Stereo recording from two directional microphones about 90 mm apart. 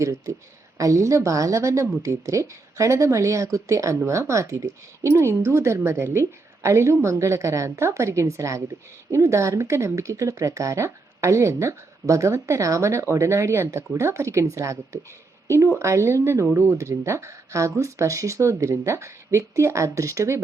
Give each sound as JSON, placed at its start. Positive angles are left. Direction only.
{"t": 0.0, "sound": "speech", "side_deg": -35}